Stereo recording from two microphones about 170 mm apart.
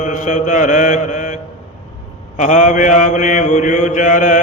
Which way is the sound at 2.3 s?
45° left (ahead or behind).